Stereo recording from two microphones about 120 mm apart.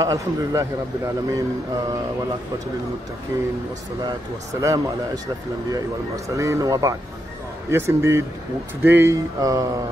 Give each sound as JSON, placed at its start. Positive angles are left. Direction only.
{"t": 0.0, "sound": "a man's voice", "side_deg": -30}
{"t": 3.3, "sound": "a man's voice", "side_deg": -30}
{"t": 4.6, "sound": "a man's voice", "side_deg": -25}